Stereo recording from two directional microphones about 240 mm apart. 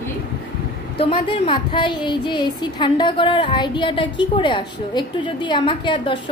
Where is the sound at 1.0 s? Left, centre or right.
Left.